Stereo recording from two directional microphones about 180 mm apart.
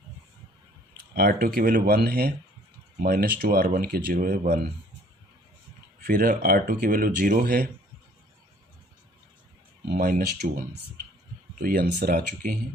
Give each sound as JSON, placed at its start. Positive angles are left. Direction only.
{"t": 1.1, "sound": "speech", "side_deg": -55}
{"t": 6.0, "sound": "speech", "side_deg": -50}
{"t": 9.9, "sound": "speech", "side_deg": -55}